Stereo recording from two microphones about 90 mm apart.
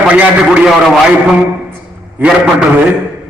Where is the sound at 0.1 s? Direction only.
15° right (ahead or behind).